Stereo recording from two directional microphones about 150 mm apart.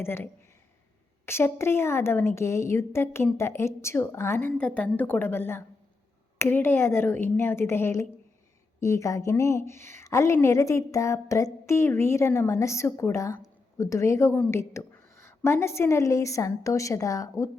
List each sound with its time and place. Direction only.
0.0 s a woman's voice: 15° left (ahead or behind)